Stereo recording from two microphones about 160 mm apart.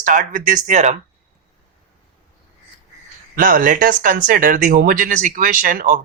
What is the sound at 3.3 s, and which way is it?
Speech, 60° right (ahead or behind).